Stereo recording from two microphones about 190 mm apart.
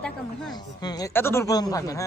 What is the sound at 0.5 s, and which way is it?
Speech, 20° left (ahead or behind).